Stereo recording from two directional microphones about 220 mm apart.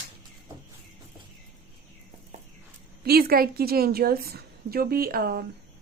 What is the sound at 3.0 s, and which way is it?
A woman's voice, 45° right (ahead or behind).